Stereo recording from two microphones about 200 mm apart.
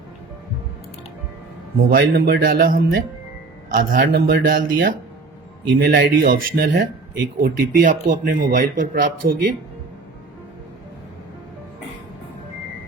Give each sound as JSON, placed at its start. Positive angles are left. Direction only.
{"t": 1.7, "sound": "speech", "side_deg": -45}